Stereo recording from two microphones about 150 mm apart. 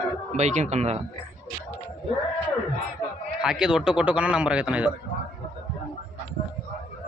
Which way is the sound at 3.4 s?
5° right (ahead or behind).